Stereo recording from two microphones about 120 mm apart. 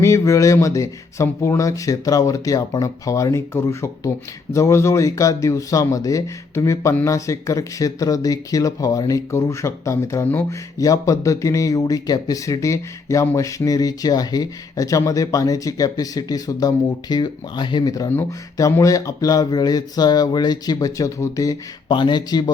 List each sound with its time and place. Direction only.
0.0 s speech: 25° left (ahead or behind)
18.1 s speech: 20° left (ahead or behind); by 22.5 s 35° left (ahead or behind)